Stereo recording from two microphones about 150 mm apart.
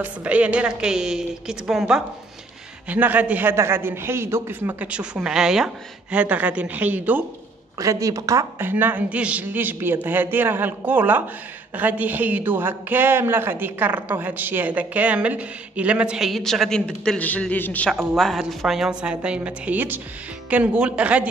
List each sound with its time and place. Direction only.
0.0 s a woman's voice: 10° right (ahead or behind)
7.8 s a man's voice: 20° right (ahead or behind)